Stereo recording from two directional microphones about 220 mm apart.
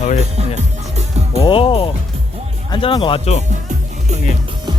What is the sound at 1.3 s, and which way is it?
Speech, 25° left (ahead or behind).